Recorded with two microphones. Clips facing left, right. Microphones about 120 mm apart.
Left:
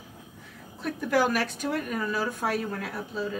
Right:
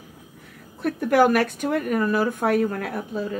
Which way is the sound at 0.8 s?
55° right (ahead or behind).